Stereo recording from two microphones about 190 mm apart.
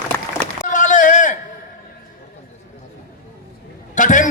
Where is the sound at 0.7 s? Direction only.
40° left (ahead or behind).